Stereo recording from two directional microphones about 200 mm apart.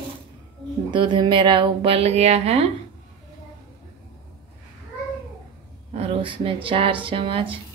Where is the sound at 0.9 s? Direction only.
20° right (ahead or behind).